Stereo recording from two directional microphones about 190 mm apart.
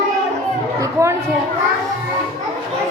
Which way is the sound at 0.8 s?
15° right (ahead or behind).